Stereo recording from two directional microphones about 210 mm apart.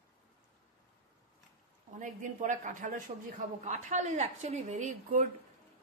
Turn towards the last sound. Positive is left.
turn(degrees=-35)  # may be behind; listen again after turning